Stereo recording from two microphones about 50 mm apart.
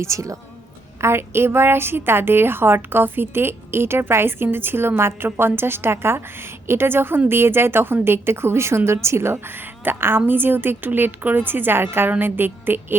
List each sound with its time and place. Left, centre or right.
0.0 s a woman's voice: right
1.0 s a woman's voice: right
9.8 s a woman's voice: right